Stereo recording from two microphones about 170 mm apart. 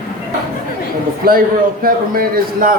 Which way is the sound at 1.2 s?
60° right (ahead or behind).